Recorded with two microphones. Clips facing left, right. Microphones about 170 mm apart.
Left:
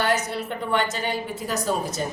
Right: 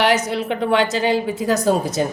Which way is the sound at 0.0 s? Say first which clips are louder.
Right 6 dB; 90° right.